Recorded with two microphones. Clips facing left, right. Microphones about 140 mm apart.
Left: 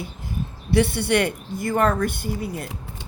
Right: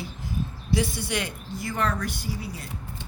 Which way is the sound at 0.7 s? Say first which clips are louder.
Left 8 dB; 65° left (ahead or behind).